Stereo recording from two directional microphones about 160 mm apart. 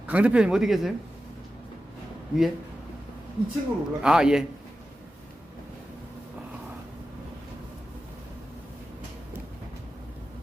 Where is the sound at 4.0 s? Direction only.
5° right (ahead or behind).